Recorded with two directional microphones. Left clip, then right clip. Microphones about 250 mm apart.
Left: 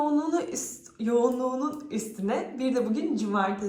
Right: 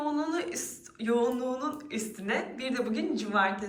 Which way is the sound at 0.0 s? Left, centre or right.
Left.